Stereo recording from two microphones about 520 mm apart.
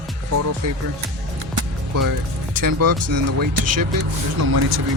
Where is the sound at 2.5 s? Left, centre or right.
Right.